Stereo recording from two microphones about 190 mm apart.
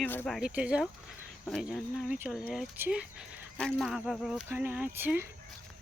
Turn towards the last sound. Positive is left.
turn(degrees=-10)  # may be behind; listen again after turning